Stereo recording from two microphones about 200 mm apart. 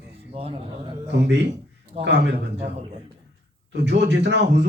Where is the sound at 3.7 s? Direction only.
60° right (ahead or behind).